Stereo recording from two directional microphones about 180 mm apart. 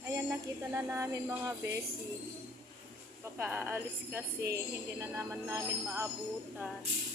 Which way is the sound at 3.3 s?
10° right (ahead or behind).